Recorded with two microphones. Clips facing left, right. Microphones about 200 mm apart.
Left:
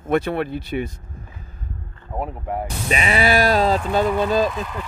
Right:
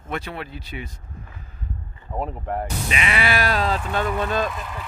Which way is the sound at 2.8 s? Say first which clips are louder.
Left 6 dB; 35° left (ahead or behind).